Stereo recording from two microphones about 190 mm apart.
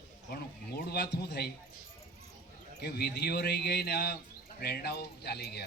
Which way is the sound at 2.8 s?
55° left (ahead or behind).